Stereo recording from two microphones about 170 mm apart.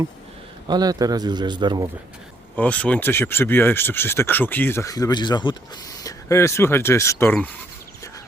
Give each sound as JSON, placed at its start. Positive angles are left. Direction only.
{"t": 0.7, "sound": "speech", "side_deg": -20}
{"t": 2.6, "sound": "speech", "side_deg": 10}